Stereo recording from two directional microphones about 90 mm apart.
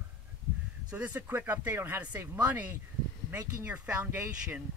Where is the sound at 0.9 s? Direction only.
20° right (ahead or behind).